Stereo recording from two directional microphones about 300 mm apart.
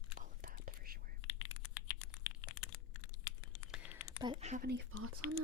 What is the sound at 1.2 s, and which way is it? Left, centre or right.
Computer keyboard, left.